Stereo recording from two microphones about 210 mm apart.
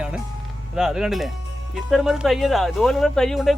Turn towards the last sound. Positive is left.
turn(degrees=0)  # may be behind; listen again after turning